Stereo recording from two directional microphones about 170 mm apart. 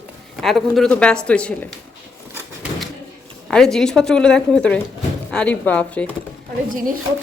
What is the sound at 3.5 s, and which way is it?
A woman's voice, centre (ahead or behind).